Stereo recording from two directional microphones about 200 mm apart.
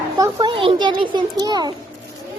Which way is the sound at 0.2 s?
20° right (ahead or behind).